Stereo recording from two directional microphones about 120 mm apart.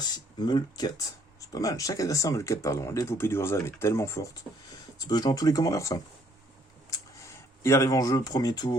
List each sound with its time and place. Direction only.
0.0 s speech: 35° left (ahead or behind)
7.3 s speech: 25° left (ahead or behind)